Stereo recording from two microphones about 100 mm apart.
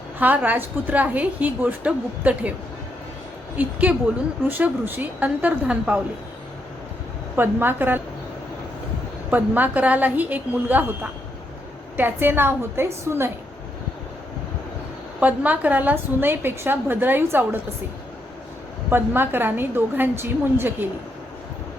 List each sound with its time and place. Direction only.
0.2 s a woman's voice: 15° right (ahead or behind)
3.6 s a woman's voice: 15° right (ahead or behind)
7.3 s a woman's voice: 20° right (ahead or behind)
9.3 s a woman's voice: 15° right (ahead or behind)
15.2 s a woman's voice: 15° right (ahead or behind)
18.9 s a woman's voice: 20° right (ahead or behind)